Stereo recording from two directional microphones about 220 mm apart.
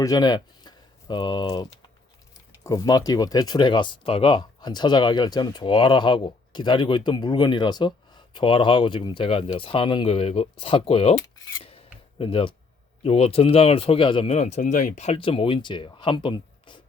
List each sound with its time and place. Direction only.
0.0 s speech: 15° left (ahead or behind)
2.6 s speech: 15° left (ahead or behind)
11.5 s filing: 25° left (ahead or behind)
12.2 s speech: 25° left (ahead or behind)